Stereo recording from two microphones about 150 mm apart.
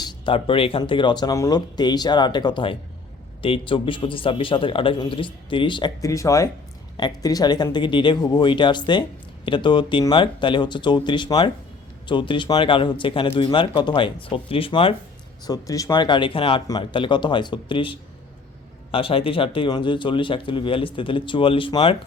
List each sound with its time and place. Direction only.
0.0 s a man's voice: 35° left (ahead or behind)
15.4 s a man's voice: 25° left (ahead or behind)